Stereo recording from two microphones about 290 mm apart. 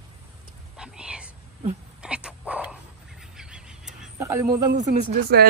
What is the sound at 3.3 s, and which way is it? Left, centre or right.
Goose, centre.